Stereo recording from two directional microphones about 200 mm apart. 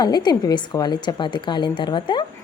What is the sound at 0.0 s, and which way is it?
A woman's voice, 20° left (ahead or behind).